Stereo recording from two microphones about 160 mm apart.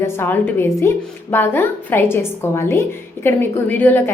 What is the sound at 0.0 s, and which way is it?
Speech, 15° left (ahead or behind).